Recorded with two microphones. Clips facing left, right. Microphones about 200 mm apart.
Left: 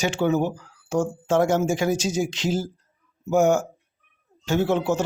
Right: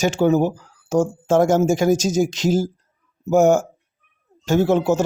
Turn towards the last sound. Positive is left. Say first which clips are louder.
# right 5 dB
turn(degrees=-40)  # may be behind; listen again after turning